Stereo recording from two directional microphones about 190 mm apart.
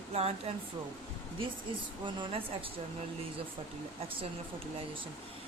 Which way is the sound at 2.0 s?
30° right (ahead or behind).